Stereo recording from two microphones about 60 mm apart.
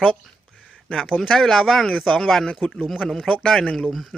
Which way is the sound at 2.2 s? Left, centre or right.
Centre.